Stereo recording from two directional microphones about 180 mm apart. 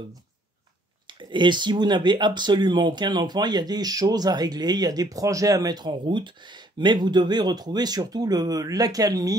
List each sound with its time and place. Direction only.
1.3 s speech: 25° right (ahead or behind)